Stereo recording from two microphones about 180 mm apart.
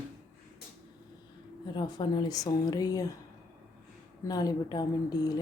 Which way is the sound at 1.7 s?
25° left (ahead or behind).